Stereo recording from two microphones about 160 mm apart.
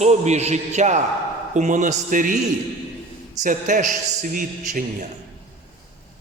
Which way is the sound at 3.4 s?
55° right (ahead or behind).